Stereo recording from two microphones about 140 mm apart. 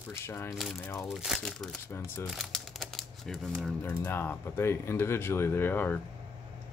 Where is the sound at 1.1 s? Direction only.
Centre (ahead or behind).